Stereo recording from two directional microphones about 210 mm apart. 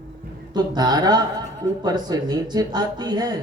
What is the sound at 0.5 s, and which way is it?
Speech, 20° right (ahead or behind).